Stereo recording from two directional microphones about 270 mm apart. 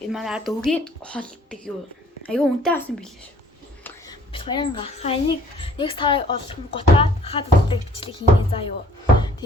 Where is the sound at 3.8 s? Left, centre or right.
Centre.